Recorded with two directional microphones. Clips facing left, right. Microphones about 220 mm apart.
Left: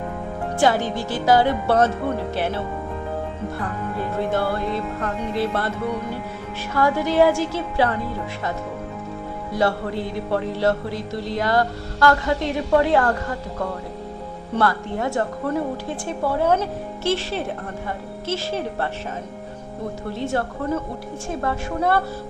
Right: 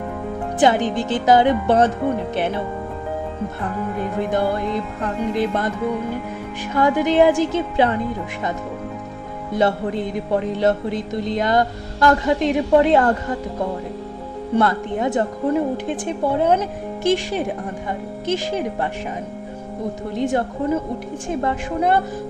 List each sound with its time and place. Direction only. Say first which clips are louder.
0.6 s music: right 3 dB; 20° right (ahead or behind)
3.9 s music: right 1 dB; 15° right (ahead or behind)
6.7 s music: right 2 dB; 20° right (ahead or behind)
9.5 s music: right 3 dB; 20° right (ahead or behind)
20.1 s music: right 5 dB; 15° right (ahead or behind)